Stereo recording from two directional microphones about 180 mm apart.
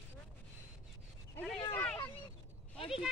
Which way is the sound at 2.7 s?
30° left (ahead or behind).